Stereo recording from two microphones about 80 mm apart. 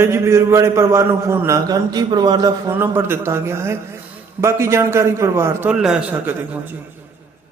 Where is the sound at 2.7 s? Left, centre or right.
Right.